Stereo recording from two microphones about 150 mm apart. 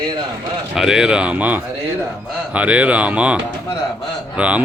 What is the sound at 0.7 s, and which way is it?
Speech, 5° right (ahead or behind).